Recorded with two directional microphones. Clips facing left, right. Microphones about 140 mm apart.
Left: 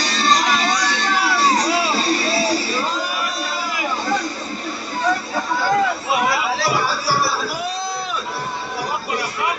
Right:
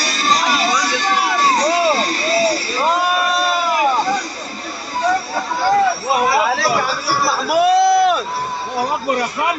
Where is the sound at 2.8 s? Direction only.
60° right (ahead or behind).